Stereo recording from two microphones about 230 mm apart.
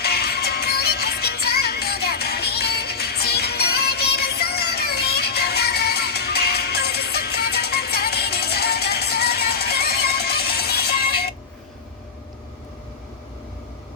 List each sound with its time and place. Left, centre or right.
0.0 s music: left